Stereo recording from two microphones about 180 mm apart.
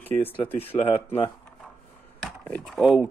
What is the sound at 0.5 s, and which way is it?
Speech, 35° left (ahead or behind).